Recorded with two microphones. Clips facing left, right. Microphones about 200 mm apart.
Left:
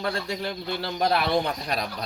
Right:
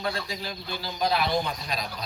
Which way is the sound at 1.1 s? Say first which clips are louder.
Left 2 dB; 60° left (ahead or behind).